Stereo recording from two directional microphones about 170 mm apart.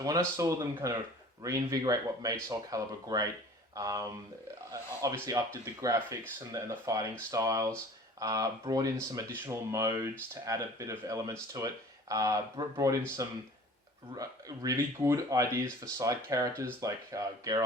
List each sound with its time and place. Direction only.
0.0 s speech: 20° right (ahead or behind)